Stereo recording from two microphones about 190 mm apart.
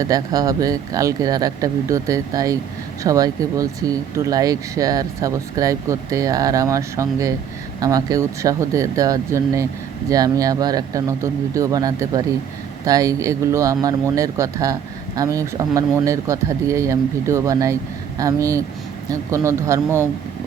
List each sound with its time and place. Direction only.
0.0 s speech: 20° right (ahead or behind)